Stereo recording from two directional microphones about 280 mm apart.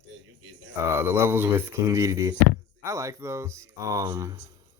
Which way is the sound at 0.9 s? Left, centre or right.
Centre.